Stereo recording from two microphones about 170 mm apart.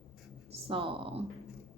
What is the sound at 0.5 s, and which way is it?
Speech, 30° right (ahead or behind).